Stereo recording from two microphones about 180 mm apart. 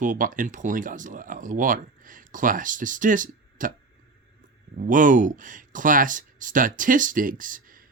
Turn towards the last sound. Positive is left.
turn(degrees=-50)  # may be behind; listen again after turning